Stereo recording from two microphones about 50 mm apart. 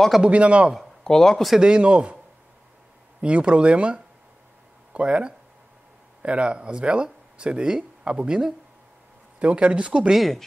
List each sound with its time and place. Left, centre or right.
0.2 s speech: right
0.7 s speech: centre
1.6 s speech: right
3.2 s speech: right
10.1 s speech: centre